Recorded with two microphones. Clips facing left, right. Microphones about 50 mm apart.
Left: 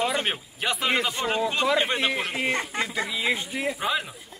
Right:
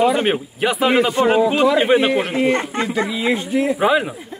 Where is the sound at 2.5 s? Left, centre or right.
Right.